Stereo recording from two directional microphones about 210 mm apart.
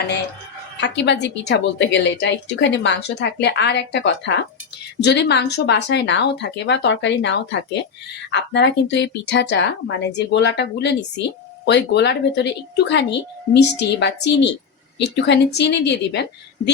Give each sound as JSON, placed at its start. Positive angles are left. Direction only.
{"t": 0.8, "sound": "a woman's voice", "side_deg": 55}